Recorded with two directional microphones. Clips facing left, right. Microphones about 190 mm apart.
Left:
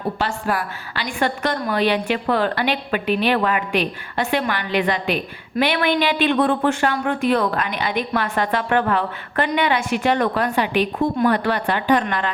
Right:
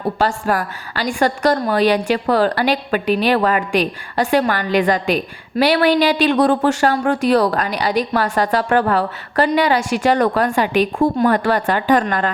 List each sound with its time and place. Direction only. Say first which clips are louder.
0.2 s a woman's voice: right 4 dB; 40° right (ahead or behind)